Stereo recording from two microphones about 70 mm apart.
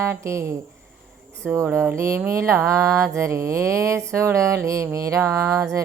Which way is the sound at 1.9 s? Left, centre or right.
Right.